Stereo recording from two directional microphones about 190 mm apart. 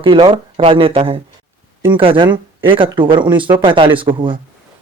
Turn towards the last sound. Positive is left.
turn(degrees=-25)  # may be behind; listen again after turning